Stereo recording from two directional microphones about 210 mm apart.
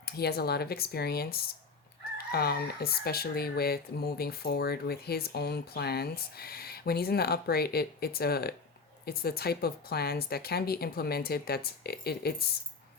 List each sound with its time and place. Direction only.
0.0 s speech: 50° left (ahead or behind)